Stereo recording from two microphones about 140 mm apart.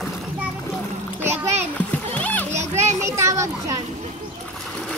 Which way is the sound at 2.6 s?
20° right (ahead or behind).